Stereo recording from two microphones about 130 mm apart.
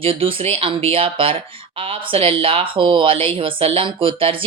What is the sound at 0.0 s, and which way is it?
A woman's voice, 45° right (ahead or behind).